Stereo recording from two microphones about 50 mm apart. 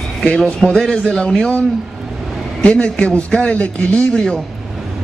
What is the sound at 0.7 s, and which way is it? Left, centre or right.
Speech, centre.